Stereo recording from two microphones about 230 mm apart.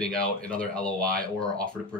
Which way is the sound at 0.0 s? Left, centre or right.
Centre.